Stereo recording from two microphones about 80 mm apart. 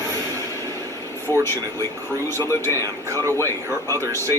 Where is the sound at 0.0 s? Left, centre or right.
Right.